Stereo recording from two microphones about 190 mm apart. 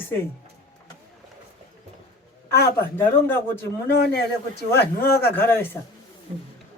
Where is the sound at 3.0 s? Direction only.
10° left (ahead or behind).